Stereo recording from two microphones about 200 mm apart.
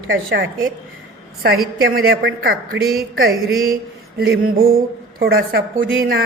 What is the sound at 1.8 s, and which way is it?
A woman's voice, 50° right (ahead or behind).